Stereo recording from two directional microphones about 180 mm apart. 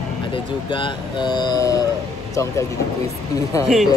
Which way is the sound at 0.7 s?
25° left (ahead or behind).